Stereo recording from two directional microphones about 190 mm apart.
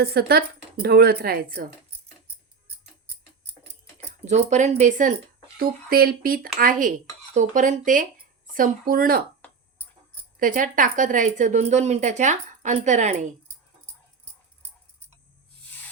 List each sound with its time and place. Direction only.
0.0 s speech: 55° right (ahead or behind)
4.3 s speech: 40° right (ahead or behind)
10.4 s speech: 45° right (ahead or behind)